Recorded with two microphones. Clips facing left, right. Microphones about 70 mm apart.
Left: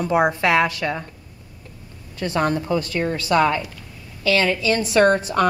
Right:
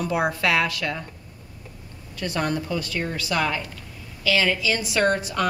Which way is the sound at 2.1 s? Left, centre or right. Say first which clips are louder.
Left 4 dB; left.